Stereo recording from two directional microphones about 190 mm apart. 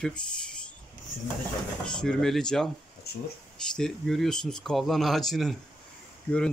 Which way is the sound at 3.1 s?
55° left (ahead or behind).